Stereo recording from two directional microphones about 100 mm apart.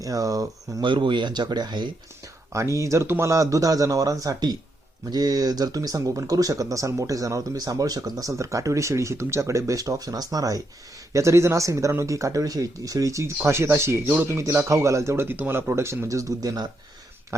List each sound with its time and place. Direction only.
0.0 s speech: 35° right (ahead or behind)
0.8 s speech: 55° right (ahead or behind)
2.5 s speech: 30° right (ahead or behind)